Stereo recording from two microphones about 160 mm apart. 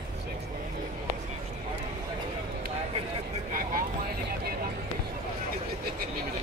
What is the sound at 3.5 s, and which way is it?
Speech, 60° right (ahead or behind).